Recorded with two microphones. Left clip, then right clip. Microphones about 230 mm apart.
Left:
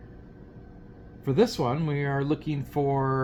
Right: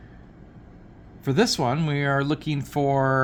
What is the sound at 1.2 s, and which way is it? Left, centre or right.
Speech, right.